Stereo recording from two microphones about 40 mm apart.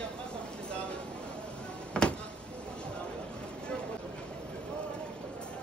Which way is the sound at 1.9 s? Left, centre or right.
Left.